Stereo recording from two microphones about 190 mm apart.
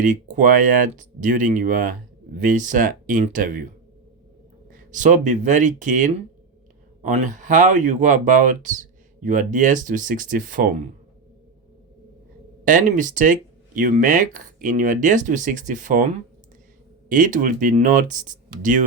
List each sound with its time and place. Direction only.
0.0 s speech: 40° right (ahead or behind)
4.7 s speech: 40° right (ahead or behind)
12.6 s speech: 45° right (ahead or behind)